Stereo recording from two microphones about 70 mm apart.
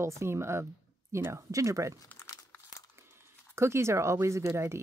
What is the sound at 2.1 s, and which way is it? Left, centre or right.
Crumpling, left.